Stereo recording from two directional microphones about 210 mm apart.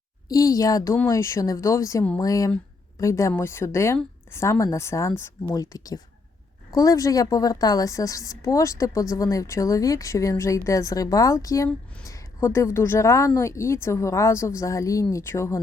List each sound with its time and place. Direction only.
0.3 s a woman's voice: 15° left (ahead or behind)